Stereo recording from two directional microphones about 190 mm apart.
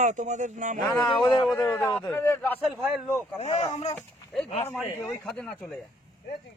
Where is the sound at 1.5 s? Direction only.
5° left (ahead or behind).